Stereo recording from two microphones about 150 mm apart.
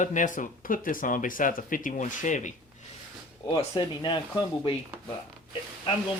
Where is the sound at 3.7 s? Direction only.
30° left (ahead or behind).